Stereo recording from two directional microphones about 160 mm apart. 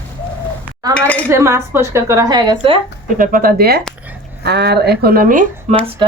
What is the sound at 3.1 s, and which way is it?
Speech, 60° right (ahead or behind).